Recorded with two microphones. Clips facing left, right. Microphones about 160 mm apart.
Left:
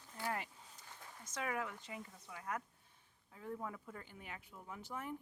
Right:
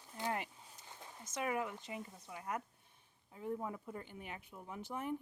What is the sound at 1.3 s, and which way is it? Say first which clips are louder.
Speech: right 3 dB; 20° right (ahead or behind).